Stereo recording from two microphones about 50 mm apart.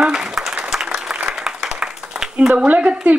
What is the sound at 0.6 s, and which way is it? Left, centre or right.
Applause, centre.